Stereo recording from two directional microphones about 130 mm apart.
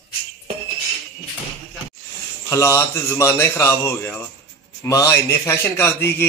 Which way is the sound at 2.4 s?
20° left (ahead or behind).